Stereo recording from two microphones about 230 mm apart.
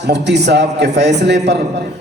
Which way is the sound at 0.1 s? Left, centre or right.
Right.